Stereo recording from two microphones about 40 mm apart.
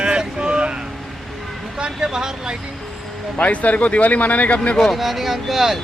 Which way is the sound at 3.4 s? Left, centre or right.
Left.